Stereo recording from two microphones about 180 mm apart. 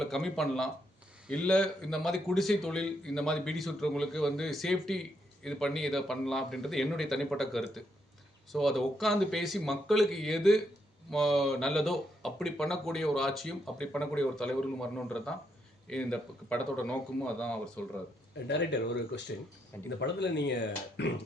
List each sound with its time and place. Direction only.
0.0 s speech: centre (ahead or behind)
18.4 s speech: 70° left (ahead or behind)